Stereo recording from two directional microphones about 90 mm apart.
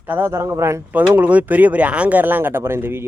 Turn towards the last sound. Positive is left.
turn(degrees=-25)  # may be behind; listen again after turning